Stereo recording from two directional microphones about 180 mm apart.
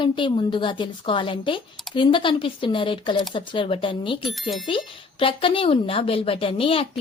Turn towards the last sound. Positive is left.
turn(degrees=30)  # may be behind; listen again after turning